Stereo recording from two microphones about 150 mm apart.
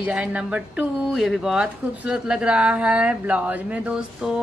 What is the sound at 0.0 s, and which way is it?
Speech, 5° right (ahead or behind).